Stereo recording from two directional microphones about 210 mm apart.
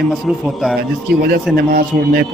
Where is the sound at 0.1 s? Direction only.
Centre (ahead or behind).